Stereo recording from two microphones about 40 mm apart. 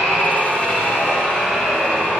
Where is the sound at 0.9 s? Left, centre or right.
Centre.